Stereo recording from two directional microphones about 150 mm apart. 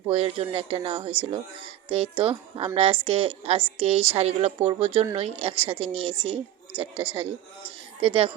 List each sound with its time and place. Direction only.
0.1 s speech: 40° right (ahead or behind)